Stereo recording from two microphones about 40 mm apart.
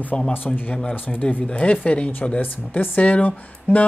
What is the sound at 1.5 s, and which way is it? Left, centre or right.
Speech, left.